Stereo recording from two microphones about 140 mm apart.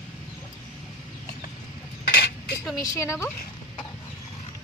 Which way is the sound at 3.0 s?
20° left (ahead or behind).